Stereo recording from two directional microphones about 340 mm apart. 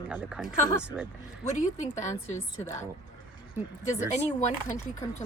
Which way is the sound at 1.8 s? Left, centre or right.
Left.